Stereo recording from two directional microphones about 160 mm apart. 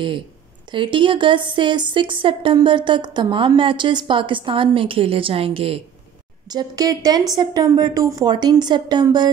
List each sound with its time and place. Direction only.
0.7 s a woman's voice: 30° right (ahead or behind)
6.5 s a woman's voice: 25° right (ahead or behind)